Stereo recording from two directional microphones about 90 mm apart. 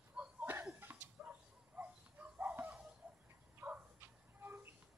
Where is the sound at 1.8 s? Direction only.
20° right (ahead or behind).